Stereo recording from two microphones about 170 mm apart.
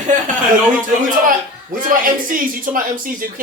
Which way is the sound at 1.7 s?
55° right (ahead or behind).